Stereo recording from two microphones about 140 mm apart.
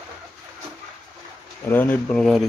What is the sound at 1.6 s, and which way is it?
Speech, 15° left (ahead or behind).